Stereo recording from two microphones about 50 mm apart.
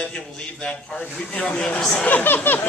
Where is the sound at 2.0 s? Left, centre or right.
Left.